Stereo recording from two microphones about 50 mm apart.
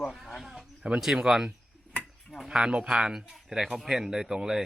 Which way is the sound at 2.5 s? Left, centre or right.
Centre.